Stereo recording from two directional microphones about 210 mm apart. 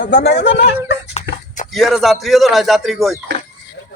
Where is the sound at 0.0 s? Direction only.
50° left (ahead or behind).